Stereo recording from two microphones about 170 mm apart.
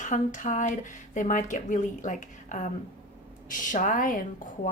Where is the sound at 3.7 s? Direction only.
50° left (ahead or behind).